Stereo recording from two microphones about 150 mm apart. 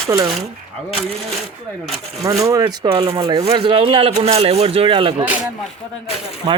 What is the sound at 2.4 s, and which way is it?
Speech, 25° right (ahead or behind).